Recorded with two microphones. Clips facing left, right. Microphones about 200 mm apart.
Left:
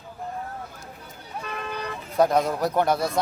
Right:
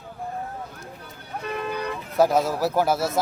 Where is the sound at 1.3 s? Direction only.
50° right (ahead or behind).